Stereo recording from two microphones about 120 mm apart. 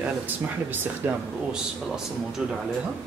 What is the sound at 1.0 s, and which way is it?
Speech, 20° right (ahead or behind).